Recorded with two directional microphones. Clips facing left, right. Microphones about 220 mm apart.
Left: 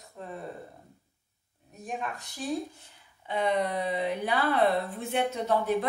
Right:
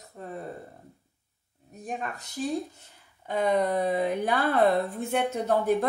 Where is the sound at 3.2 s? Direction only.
45° right (ahead or behind).